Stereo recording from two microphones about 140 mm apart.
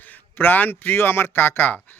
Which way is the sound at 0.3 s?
15° left (ahead or behind).